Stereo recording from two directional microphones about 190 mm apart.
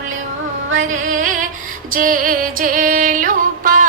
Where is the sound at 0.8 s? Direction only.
40° right (ahead or behind).